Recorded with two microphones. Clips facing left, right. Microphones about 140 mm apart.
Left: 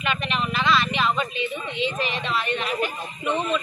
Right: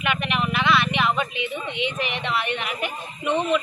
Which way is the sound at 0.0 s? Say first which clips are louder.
Right 2 dB; 15° right (ahead or behind).